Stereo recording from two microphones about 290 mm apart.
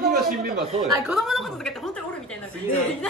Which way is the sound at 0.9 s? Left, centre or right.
Centre.